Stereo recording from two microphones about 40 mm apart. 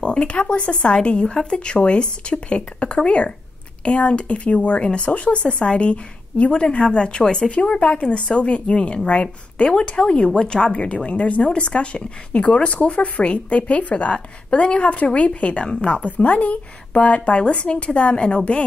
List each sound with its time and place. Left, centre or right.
0.0 s speech: left